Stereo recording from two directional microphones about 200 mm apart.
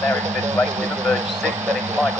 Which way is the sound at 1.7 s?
15° right (ahead or behind).